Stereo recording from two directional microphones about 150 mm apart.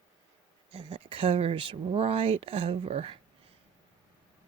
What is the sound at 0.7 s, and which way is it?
Speech, 35° right (ahead or behind).